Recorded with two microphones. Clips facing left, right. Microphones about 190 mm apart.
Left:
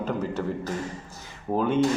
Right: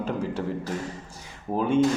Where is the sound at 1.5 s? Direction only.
10° right (ahead or behind).